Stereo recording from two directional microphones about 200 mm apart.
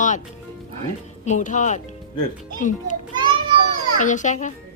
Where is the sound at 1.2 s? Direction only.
35° left (ahead or behind).